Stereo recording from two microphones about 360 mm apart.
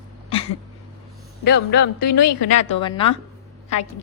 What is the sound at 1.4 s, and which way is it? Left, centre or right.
Speech, left.